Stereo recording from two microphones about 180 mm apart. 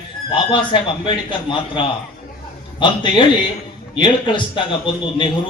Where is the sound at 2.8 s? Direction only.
30° left (ahead or behind).